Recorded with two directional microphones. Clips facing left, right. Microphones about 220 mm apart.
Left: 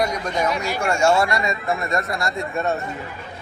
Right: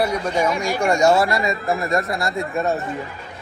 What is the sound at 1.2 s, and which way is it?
Speech, centre (ahead or behind).